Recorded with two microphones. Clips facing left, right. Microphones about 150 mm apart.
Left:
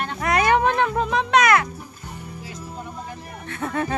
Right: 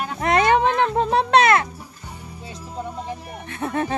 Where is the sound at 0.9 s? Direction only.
35° right (ahead or behind).